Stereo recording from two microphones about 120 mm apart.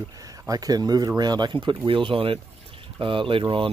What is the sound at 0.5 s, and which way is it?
Speech, 35° right (ahead or behind).